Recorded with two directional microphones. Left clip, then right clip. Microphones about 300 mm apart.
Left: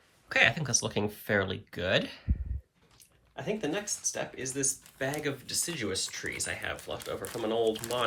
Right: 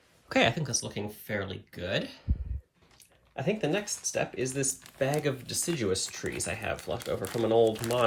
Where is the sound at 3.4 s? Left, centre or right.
Centre.